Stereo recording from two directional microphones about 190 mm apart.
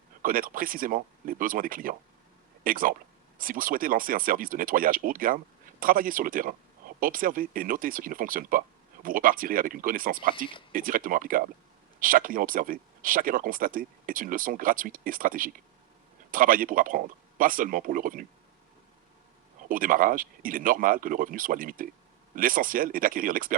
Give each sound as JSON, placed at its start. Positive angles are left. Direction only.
{"t": 0.2, "sound": "speech", "side_deg": -45}
{"t": 19.6, "sound": "speech", "side_deg": -45}